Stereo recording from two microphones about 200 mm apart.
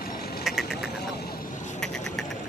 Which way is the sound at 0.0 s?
50° left (ahead or behind).